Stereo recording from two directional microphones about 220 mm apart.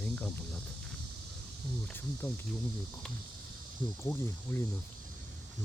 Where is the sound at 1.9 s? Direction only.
10° left (ahead or behind).